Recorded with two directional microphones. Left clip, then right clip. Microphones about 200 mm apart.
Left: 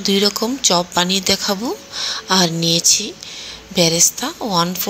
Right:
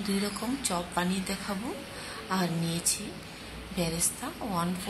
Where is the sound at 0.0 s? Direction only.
35° left (ahead or behind).